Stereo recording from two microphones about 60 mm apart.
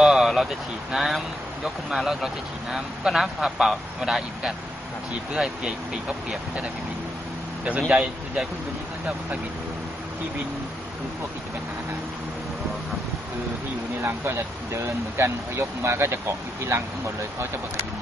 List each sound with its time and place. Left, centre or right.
0.0 s speech: centre
5.3 s speech: centre
7.9 s speech: centre
14.0 s speech: right